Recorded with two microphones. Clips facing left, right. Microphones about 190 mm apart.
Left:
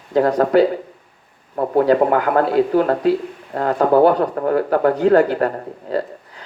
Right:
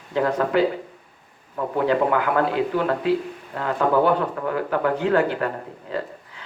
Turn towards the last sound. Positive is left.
turn(degrees=40)  # may be behind; listen again after turning